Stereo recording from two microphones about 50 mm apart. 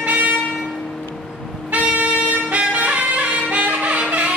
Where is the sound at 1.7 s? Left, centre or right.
Right.